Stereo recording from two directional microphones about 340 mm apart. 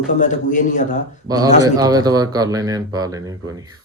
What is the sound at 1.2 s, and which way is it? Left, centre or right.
Speech, centre.